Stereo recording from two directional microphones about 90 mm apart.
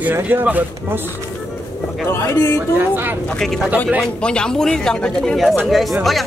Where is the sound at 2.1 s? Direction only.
30° left (ahead or behind).